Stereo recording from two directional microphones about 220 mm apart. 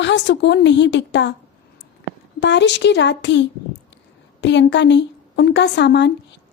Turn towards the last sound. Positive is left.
turn(degrees=50)  # may be behind; listen again after turning